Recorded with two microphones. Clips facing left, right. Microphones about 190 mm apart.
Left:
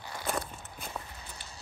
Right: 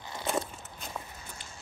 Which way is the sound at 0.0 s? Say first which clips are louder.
Right 2 dB; 20° right (ahead or behind).